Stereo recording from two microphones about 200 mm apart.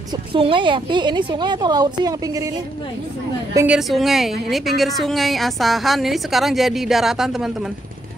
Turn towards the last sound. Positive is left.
turn(degrees=0)  # may be behind; listen again after turning